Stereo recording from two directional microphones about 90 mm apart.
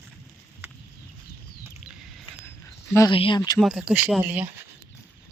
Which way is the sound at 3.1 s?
70° left (ahead or behind).